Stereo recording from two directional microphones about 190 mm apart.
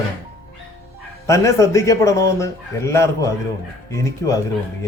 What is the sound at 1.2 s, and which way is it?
A man's voice, 15° left (ahead or behind).